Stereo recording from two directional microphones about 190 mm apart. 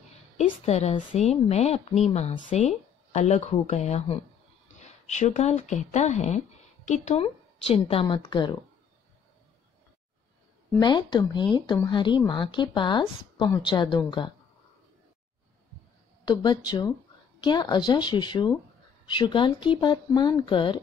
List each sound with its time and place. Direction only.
0.7 s speech: 35° left (ahead or behind)
10.8 s speech: 25° left (ahead or behind)
16.3 s speech: 25° left (ahead or behind)